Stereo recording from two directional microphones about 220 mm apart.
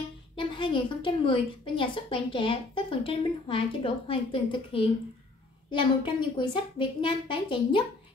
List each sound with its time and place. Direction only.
0.4 s a woman's voice: 20° left (ahead or behind)